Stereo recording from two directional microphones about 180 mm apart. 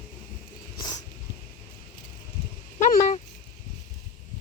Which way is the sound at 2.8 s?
40° left (ahead or behind).